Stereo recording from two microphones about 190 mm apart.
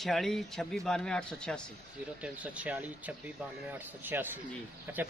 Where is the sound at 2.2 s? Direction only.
5° right (ahead or behind).